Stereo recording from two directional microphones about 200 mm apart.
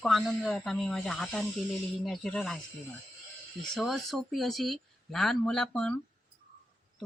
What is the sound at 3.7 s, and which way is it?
Speech, centre (ahead or behind).